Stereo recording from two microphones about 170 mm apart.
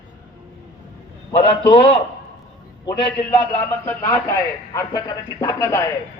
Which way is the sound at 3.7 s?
20° left (ahead or behind).